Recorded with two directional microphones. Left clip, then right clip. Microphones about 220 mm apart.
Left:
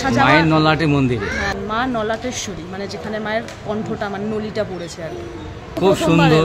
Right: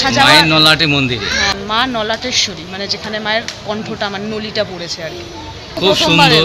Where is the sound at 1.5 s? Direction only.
Centre (ahead or behind).